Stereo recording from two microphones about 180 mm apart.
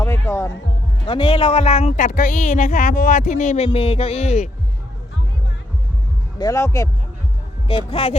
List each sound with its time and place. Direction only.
0.0 s speech: 15° left (ahead or behind)
1.0 s speech: 30° left (ahead or behind)
6.4 s speech: 20° left (ahead or behind)
7.9 s speech: 35° left (ahead or behind)